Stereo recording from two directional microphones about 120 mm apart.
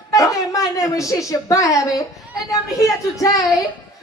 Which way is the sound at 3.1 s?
30° left (ahead or behind).